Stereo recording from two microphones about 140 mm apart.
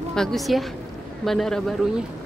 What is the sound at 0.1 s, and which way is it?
A woman's voice, 5° left (ahead or behind).